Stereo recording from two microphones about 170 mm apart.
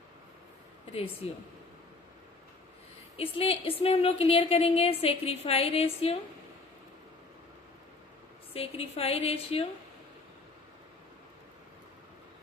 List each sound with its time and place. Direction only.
3.2 s a woman's voice: 35° left (ahead or behind)
8.5 s a woman's voice: 35° left (ahead or behind)